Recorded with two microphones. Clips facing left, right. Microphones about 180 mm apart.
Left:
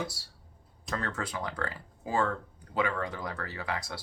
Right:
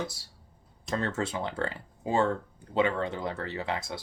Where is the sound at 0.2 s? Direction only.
20° right (ahead or behind).